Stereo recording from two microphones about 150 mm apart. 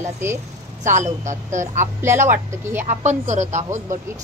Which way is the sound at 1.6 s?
15° right (ahead or behind).